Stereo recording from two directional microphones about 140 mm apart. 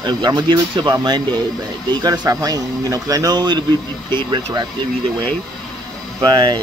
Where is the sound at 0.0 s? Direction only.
30° right (ahead or behind).